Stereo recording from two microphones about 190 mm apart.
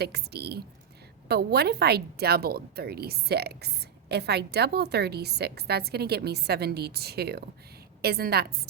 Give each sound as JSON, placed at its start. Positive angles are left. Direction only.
{"t": 0.0, "sound": "a woman's voice", "side_deg": -60}